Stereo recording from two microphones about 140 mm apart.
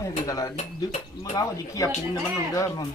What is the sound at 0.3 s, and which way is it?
Speech, 25° left (ahead or behind).